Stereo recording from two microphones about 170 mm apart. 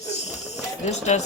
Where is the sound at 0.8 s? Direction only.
40° left (ahead or behind).